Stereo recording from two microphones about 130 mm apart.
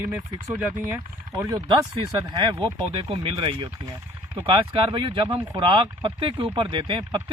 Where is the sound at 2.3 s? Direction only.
35° right (ahead or behind).